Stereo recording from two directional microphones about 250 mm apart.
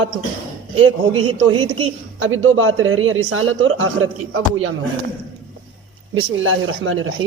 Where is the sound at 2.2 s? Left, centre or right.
Right.